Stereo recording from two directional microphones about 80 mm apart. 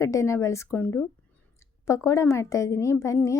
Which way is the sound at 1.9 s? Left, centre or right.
Left.